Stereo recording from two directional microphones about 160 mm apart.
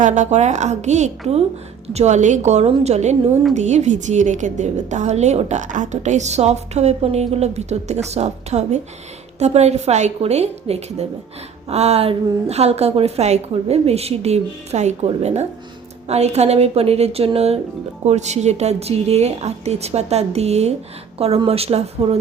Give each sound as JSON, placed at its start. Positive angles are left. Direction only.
{"t": 0.0, "sound": "a woman's voice", "side_deg": -50}